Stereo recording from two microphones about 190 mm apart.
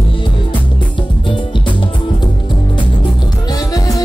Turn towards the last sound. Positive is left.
turn(degrees=20)  # may be behind; listen again after turning